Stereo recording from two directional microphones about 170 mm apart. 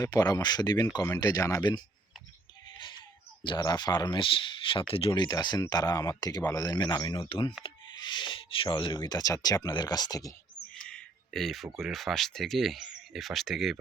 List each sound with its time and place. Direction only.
0.0 s speech: 25° left (ahead or behind)
2.7 s a sound: 25° left (ahead or behind)
3.4 s speech: 25° left (ahead or behind)
10.8 s speech: 5° left (ahead or behind)